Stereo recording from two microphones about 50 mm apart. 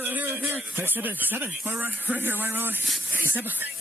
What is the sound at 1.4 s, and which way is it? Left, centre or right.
Speech, right.